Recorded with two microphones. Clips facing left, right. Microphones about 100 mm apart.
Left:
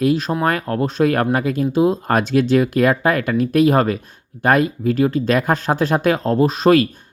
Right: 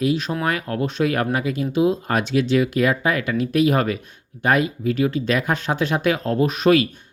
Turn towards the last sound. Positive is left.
turn(degrees=35)  # may be behind; listen again after turning